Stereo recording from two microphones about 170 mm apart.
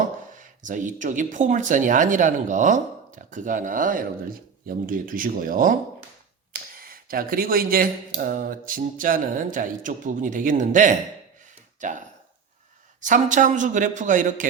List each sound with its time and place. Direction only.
0.3 s speech: 50° right (ahead or behind)